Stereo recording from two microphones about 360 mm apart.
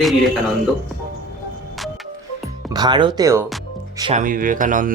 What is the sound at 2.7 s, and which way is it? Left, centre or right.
Speech, centre.